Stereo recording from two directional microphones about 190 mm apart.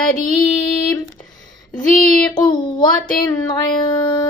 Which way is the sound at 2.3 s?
20° left (ahead or behind).